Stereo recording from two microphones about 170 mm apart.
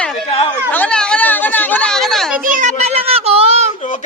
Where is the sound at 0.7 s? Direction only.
10° left (ahead or behind).